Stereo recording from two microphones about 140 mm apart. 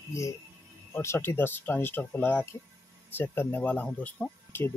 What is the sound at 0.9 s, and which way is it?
Speech, 15° left (ahead or behind).